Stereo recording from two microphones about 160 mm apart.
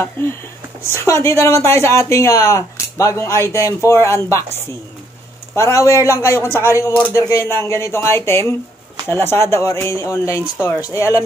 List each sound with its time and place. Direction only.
0.2 s speech: 15° left (ahead or behind)
5.5 s a man's voice: 15° left (ahead or behind)